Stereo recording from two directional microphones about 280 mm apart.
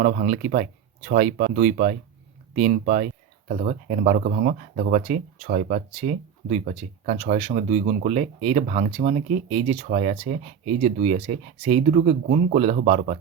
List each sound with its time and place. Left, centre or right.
0.0 s speech: right